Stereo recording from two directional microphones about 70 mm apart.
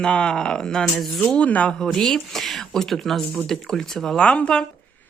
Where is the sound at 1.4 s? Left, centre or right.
Centre.